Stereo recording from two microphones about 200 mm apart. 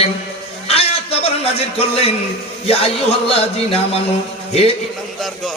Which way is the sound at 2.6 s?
30° left (ahead or behind).